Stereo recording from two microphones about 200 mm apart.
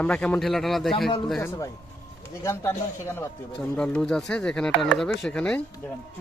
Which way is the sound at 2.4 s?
15° left (ahead or behind).